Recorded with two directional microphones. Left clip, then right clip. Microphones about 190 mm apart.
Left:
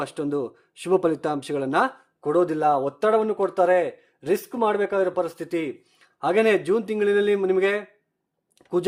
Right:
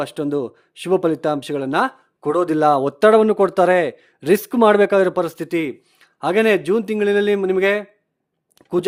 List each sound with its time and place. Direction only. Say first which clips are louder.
0.0 s speech: right 5 dB; 25° right (ahead or behind)
2.2 s speech: right 4 dB; 40° right (ahead or behind)